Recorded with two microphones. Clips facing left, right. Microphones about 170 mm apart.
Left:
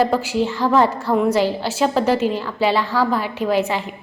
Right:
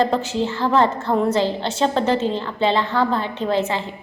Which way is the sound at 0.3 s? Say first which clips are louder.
Left 2 dB; 15° left (ahead or behind).